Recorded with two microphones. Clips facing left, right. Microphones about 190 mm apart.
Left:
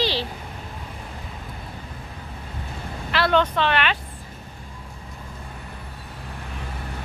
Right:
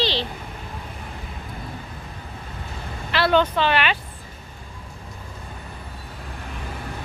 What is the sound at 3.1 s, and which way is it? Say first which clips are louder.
Speech: right 1 dB; centre (ahead or behind).